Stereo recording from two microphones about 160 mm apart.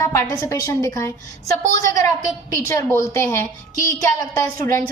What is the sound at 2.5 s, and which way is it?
A woman's voice, 20° left (ahead or behind).